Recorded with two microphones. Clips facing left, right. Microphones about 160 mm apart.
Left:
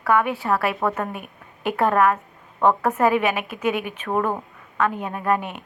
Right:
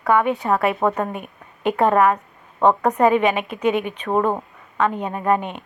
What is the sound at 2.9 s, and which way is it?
A woman's voice, 5° left (ahead or behind).